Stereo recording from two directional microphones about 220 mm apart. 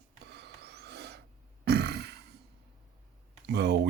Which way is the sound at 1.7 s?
50° right (ahead or behind).